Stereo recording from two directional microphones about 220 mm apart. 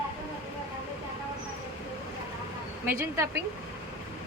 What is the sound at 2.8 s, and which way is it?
Speech, 10° right (ahead or behind).